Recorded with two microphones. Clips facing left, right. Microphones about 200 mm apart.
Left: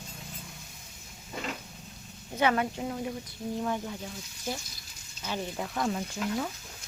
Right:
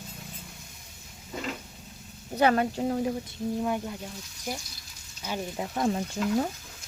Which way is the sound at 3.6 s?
10° right (ahead or behind).